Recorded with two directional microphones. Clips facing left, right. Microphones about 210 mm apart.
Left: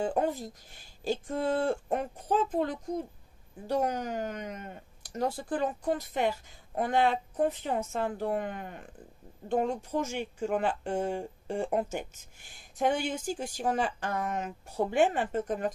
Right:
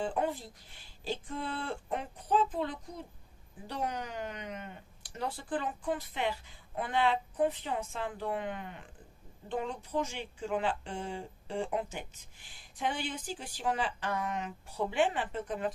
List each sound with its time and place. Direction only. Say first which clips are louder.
0.0 s speech: left 4 dB; 45° left (ahead or behind)